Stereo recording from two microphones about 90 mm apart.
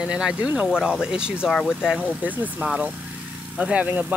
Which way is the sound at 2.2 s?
15° right (ahead or behind).